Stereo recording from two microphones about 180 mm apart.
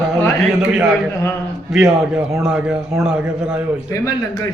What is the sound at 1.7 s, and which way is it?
A man's voice, 5° right (ahead or behind).